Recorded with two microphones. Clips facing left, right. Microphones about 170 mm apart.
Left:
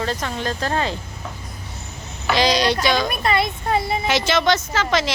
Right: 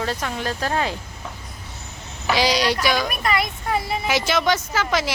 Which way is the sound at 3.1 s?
30° left (ahead or behind).